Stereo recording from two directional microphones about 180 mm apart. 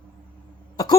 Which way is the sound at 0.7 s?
20° left (ahead or behind).